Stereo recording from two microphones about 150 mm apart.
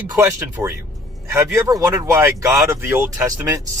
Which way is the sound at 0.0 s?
15° right (ahead or behind).